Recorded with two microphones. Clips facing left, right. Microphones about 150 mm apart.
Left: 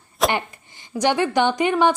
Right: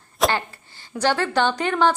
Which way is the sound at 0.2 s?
Centre (ahead or behind).